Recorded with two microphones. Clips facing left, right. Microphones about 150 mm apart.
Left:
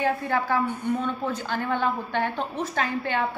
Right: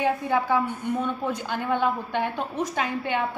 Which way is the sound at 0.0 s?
15° right (ahead or behind).